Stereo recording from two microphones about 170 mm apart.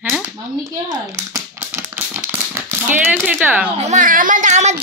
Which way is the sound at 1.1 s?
15° right (ahead or behind).